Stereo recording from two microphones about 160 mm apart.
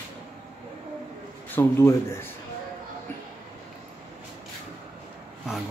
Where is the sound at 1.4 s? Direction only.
15° left (ahead or behind).